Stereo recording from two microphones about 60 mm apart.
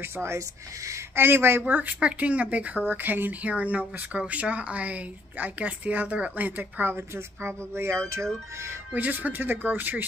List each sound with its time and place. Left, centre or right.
0.0 s speech: right
1.7 s speech: right
8.9 s speech: right